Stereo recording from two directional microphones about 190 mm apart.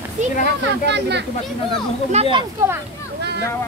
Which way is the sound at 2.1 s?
30° right (ahead or behind).